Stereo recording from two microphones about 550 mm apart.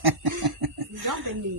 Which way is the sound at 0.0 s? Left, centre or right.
Right.